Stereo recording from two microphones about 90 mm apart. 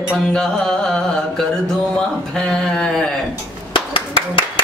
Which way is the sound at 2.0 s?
10° left (ahead or behind).